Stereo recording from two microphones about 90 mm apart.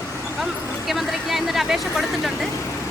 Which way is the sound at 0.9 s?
Centre (ahead or behind).